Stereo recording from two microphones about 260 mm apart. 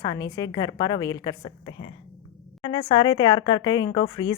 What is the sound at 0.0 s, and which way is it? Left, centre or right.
Speech, centre.